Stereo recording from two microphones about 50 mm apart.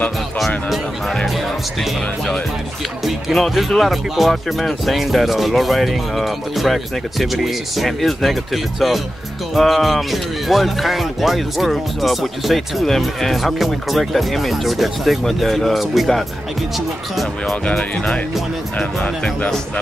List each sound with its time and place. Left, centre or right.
1.2 s music: centre
3.3 s speech: centre
17.6 s speech: left